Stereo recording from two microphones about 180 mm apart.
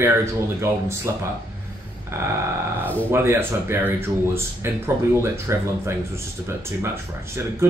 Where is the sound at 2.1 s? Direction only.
15° right (ahead or behind).